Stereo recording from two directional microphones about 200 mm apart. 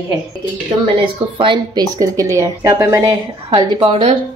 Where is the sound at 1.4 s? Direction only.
20° right (ahead or behind).